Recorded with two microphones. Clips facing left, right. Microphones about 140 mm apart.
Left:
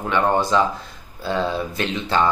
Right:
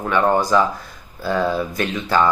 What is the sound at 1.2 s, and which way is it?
Speech, 50° right (ahead or behind).